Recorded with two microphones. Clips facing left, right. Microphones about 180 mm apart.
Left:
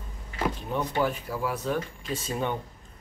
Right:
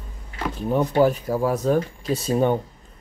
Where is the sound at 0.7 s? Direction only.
40° right (ahead or behind).